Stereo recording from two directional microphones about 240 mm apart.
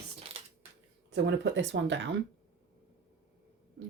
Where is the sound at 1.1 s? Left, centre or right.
Right.